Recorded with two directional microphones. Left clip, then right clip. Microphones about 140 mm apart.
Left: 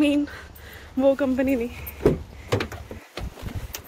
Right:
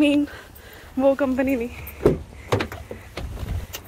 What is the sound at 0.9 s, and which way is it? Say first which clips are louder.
Speech: right 1 dB; 20° left (ahead or behind).